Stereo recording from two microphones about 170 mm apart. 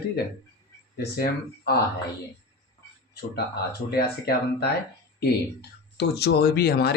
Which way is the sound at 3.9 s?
65° left (ahead or behind).